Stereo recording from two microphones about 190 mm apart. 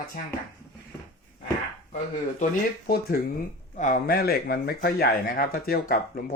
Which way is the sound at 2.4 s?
50° left (ahead or behind).